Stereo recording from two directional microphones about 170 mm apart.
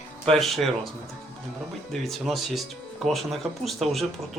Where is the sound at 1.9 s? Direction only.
Centre (ahead or behind).